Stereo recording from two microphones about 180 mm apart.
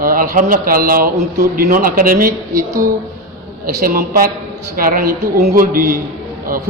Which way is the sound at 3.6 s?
50° right (ahead or behind).